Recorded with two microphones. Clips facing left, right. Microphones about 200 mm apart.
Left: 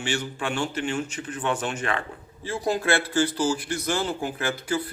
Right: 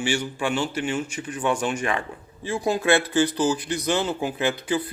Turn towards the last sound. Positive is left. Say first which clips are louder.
# right 3 dB
turn(degrees=-20)  # may be behind; listen again after turning